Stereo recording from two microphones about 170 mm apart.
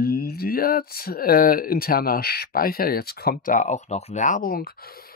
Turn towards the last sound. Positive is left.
turn(degrees=60)  # may be behind; listen again after turning